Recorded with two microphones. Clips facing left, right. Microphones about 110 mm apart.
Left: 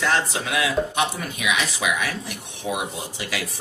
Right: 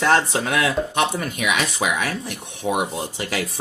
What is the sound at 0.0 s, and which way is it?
Speech, 50° right (ahead or behind).